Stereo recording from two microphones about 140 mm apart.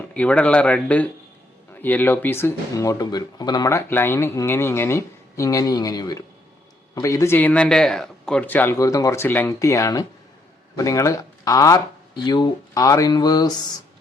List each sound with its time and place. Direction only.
0.1 s speech: 10° left (ahead or behind); by 13.7 s 30° left (ahead or behind)